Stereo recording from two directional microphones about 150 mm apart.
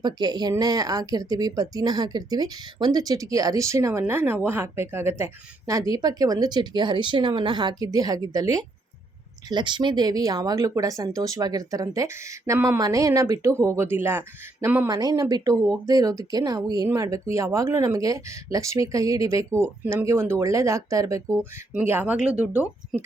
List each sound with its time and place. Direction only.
0.0 s speech: 30° right (ahead or behind)
14.8 s speech: 25° right (ahead or behind); by 23.0 s 5° right (ahead or behind)